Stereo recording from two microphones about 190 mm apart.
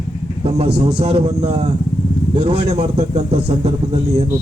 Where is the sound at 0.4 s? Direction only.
30° right (ahead or behind).